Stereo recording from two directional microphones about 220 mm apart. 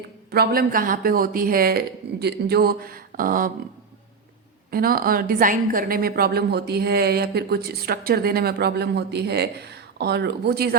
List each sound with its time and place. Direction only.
0.3 s speech: 45° right (ahead or behind)
4.7 s a woman's voice: 40° right (ahead or behind)